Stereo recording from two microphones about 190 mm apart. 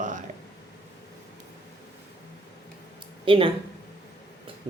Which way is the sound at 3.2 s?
25° right (ahead or behind).